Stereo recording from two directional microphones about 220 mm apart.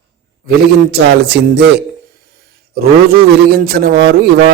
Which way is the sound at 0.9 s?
50° right (ahead or behind).